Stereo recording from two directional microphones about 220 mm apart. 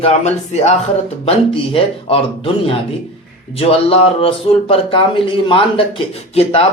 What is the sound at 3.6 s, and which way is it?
Speech, 25° left (ahead or behind).